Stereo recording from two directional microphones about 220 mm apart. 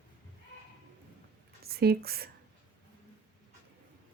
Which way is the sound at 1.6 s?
45° right (ahead or behind).